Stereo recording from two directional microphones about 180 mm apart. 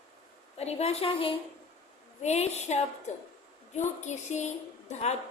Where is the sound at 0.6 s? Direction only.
35° left (ahead or behind).